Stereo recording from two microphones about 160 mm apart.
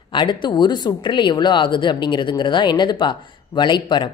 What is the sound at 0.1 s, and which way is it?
Speech, 30° left (ahead or behind).